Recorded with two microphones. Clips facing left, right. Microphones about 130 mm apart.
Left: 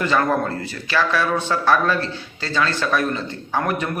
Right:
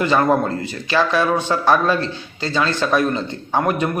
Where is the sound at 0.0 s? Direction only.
20° right (ahead or behind).